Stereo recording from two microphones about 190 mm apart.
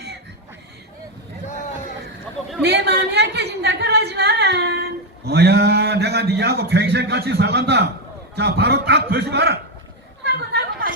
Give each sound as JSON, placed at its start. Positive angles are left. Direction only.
{"t": 2.6, "sound": "a sound", "side_deg": -60}
{"t": 8.4, "sound": "a man's voice", "side_deg": -60}
{"t": 10.2, "sound": "chatter", "side_deg": -55}